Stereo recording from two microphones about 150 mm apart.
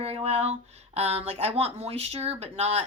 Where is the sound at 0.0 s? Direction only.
45° right (ahead or behind).